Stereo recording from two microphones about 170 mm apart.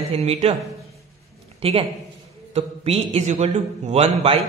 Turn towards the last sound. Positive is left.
turn(degrees=-35)  # may be behind; listen again after turning